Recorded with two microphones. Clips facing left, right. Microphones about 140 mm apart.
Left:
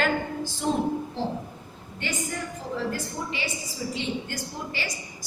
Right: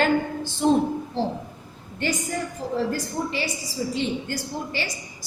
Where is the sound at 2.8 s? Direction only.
35° right (ahead or behind).